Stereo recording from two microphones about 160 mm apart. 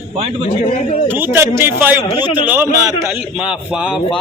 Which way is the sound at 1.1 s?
15° right (ahead or behind).